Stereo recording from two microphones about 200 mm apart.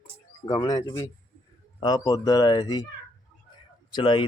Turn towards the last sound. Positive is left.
turn(degrees=25)  # may be behind; listen again after turning